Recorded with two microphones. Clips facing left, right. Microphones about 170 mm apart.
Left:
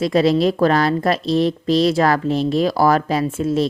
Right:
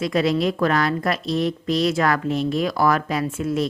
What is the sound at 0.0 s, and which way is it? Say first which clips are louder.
A woman's voice: left 5 dB; 30° left (ahead or behind).